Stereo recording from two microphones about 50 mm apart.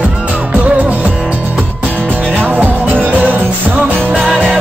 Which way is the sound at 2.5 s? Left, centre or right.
Right.